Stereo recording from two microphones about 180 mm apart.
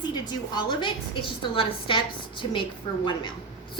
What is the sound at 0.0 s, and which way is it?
A woman's voice, 25° left (ahead or behind).